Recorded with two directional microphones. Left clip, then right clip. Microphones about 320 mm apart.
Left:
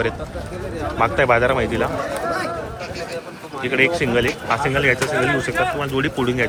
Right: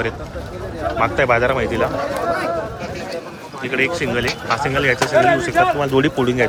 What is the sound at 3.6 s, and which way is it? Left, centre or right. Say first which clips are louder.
Speech: left 1 dB; centre.